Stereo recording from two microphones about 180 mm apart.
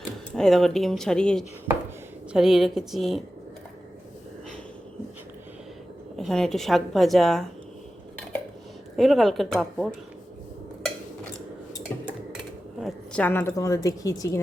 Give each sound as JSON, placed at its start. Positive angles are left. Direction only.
{"t": 0.3, "sound": "a woman's voice", "side_deg": 0}
{"t": 6.1, "sound": "a woman's voice", "side_deg": 0}
{"t": 9.0, "sound": "a woman's voice", "side_deg": 0}
{"t": 12.8, "sound": "a woman's voice", "side_deg": 10}